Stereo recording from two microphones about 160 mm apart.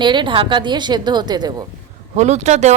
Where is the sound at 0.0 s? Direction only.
30° right (ahead or behind).